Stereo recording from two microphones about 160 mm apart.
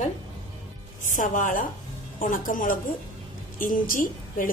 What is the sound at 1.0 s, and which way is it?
A woman's voice, 55° left (ahead or behind).